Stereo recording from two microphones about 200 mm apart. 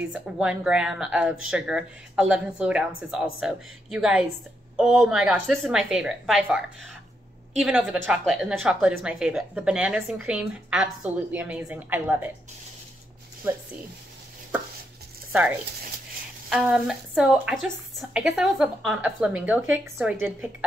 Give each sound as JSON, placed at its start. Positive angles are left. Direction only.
{"t": 0.1, "sound": "a woman's voice", "side_deg": -5}
{"t": 15.3, "sound": "a woman's voice", "side_deg": -10}